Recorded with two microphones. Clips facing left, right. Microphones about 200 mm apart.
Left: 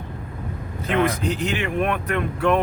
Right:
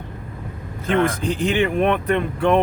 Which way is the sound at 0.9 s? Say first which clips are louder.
Right 2 dB; 30° right (ahead or behind).